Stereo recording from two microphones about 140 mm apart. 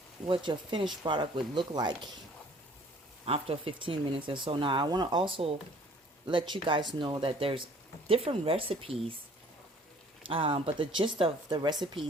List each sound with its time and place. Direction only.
0.3 s speech: 35° right (ahead or behind)
3.2 s speech: 45° right (ahead or behind)
10.2 s speech: 40° right (ahead or behind)